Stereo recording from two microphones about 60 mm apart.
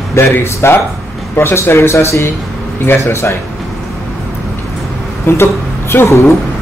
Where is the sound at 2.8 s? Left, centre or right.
Left.